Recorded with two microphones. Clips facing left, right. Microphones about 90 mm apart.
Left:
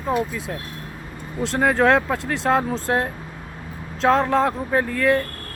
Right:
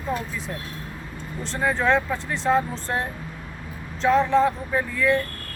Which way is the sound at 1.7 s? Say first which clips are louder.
Left 3 dB; 65° left (ahead or behind).